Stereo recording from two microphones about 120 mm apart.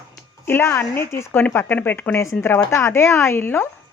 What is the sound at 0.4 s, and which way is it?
Speech, 20° left (ahead or behind).